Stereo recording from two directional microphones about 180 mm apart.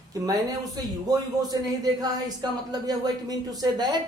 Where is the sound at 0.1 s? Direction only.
20° right (ahead or behind).